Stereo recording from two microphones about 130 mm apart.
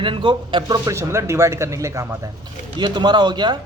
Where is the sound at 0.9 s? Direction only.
20° right (ahead or behind).